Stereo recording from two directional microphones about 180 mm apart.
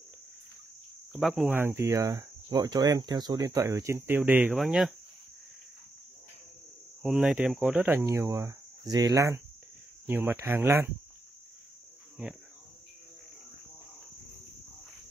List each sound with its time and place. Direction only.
1.1 s cricket: centre (ahead or behind)
1.5 s speech: 15° right (ahead or behind)
7.0 s speech: centre (ahead or behind)
12.2 s speech: 5° right (ahead or behind)